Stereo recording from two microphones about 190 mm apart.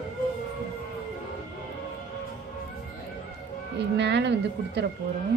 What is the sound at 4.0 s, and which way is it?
Speech, 65° right (ahead or behind).